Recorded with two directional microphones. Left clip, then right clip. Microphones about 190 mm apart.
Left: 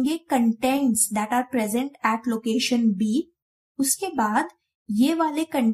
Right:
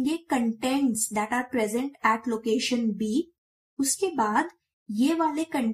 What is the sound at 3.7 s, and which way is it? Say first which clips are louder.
A woman's voice: left 1 dB; 45° left (ahead or behind).